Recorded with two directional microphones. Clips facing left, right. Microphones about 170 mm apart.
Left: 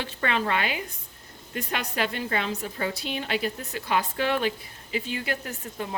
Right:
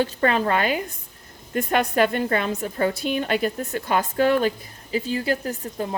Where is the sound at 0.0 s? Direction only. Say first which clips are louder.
Right 7 dB; 40° right (ahead or behind).